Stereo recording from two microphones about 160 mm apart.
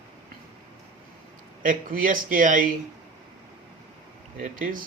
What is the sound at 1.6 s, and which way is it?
Speech, 55° right (ahead or behind).